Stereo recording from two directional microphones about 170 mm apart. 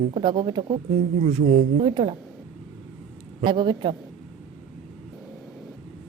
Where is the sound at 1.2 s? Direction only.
40° right (ahead or behind).